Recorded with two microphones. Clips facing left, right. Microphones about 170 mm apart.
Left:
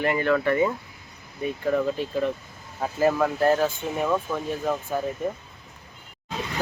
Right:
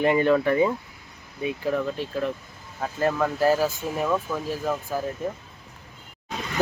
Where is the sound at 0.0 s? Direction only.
20° right (ahead or behind).